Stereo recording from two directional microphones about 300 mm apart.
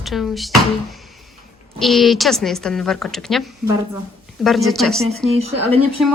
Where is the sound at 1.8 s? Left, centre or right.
Centre.